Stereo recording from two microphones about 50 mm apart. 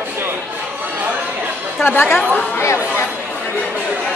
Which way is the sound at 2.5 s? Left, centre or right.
Left.